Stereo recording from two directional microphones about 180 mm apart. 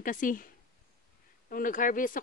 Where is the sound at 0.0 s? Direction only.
50° left (ahead or behind).